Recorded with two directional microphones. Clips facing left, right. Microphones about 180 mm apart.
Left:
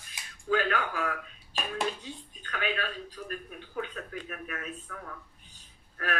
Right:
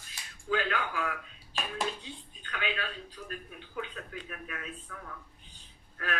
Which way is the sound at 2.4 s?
45° left (ahead or behind).